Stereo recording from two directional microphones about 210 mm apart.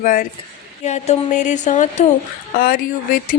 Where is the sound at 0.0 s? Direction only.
40° left (ahead or behind).